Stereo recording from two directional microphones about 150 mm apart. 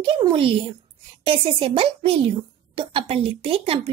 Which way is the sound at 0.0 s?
35° right (ahead or behind).